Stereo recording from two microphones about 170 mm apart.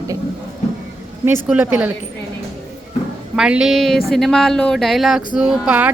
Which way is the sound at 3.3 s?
5° right (ahead or behind).